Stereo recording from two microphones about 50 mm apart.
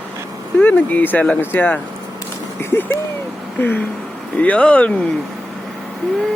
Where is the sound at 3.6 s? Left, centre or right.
Left.